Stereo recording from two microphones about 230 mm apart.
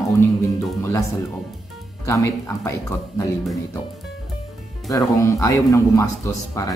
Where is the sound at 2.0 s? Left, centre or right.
Centre.